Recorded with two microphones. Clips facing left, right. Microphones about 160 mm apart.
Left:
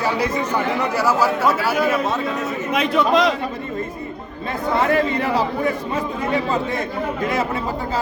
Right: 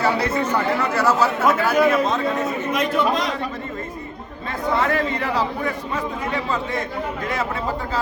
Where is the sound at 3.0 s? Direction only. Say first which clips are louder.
Left 7 dB; 90° left.